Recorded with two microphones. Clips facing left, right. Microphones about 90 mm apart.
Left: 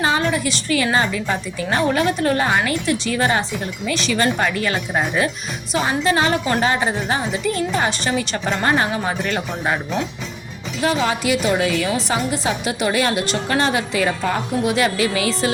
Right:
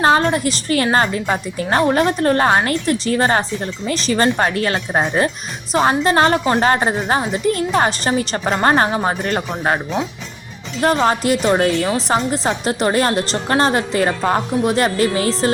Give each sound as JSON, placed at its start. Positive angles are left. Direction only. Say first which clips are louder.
{"t": 0.0, "sound": "a woman's voice", "louder": "right 5 dB", "side_deg": -50}